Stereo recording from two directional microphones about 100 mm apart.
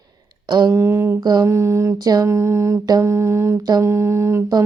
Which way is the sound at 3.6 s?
40° right (ahead or behind).